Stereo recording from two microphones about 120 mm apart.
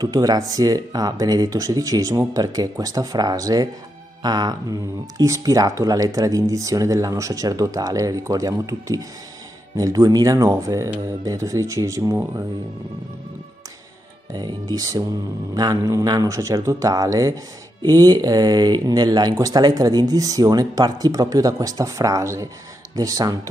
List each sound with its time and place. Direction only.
0.0 s speech: 35° right (ahead or behind)
14.3 s speech: 35° right (ahead or behind)